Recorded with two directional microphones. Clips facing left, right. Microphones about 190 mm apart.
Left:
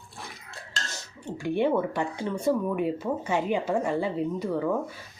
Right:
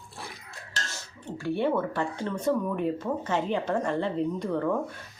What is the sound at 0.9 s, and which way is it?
Speech, 15° left (ahead or behind).